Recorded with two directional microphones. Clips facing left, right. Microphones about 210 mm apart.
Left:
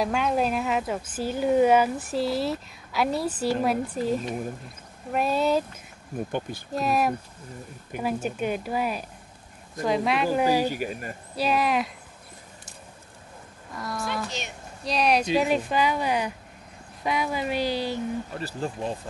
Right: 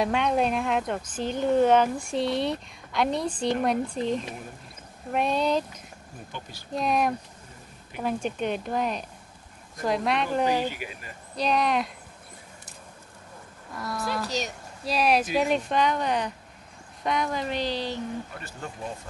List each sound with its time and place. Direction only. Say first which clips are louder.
0.0 s speech: even; centre (ahead or behind)
6.7 s speech: left 1 dB; 5° left (ahead or behind)
10.7 s speech: left 8 dB; 45° left (ahead or behind)
11.3 s speech: left 1 dB; 5° left (ahead or behind)
13.7 s speech: even; centre (ahead or behind)
18.4 s speech: left 7 dB; 30° left (ahead or behind)